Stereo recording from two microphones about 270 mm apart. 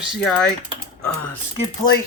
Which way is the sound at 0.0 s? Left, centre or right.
Centre.